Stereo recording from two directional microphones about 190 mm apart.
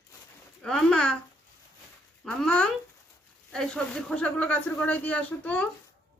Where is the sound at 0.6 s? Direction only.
5° left (ahead or behind).